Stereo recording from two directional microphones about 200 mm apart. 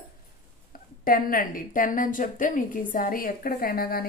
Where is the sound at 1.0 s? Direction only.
45° left (ahead or behind).